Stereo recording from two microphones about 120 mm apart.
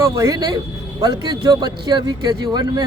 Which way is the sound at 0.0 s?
30° right (ahead or behind).